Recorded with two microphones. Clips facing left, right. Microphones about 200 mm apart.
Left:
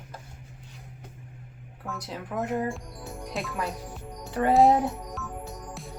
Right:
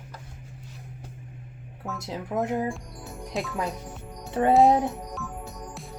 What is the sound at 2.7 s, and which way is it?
Music, centre (ahead or behind).